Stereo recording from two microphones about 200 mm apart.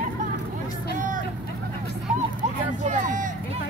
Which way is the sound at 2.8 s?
40° right (ahead or behind).